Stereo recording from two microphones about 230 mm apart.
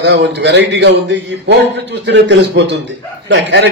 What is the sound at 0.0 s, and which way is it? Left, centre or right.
Speech, right.